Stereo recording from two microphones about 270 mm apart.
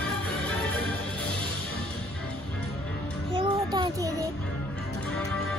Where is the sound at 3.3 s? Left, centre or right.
Centre.